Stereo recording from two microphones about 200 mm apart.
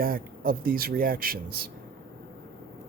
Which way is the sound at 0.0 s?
45° right (ahead or behind).